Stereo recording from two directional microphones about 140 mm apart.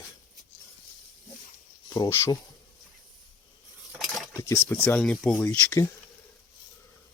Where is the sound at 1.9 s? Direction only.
25° left (ahead or behind).